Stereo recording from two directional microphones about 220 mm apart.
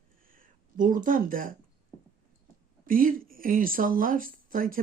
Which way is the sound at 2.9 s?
40° right (ahead or behind).